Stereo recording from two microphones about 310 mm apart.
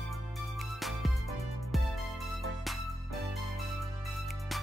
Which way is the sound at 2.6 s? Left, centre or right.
Centre.